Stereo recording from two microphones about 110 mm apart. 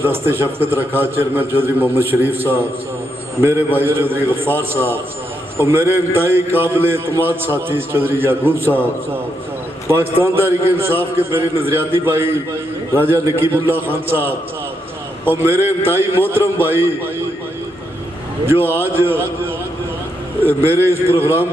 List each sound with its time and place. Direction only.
0.0 s a man's voice: 20° right (ahead or behind)
3.8 s a man's voice: 20° right (ahead or behind)
5.5 s a man's voice: 20° right (ahead or behind)
9.9 s a man's voice: 20° right (ahead or behind)
18.4 s a man's voice: 20° right (ahead or behind)
20.7 s a man's voice: 20° right (ahead or behind)